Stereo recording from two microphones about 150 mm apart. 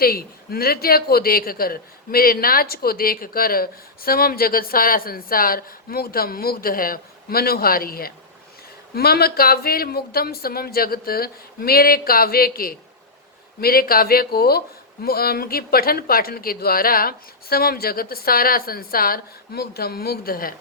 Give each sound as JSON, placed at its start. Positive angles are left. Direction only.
{"t": 0.0, "sound": "a man's voice", "side_deg": 85}
{"t": 9.0, "sound": "a man's voice", "side_deg": 90}